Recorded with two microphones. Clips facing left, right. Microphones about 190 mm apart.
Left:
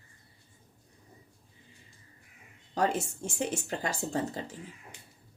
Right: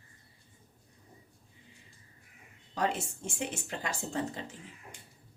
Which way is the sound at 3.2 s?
40° left (ahead or behind).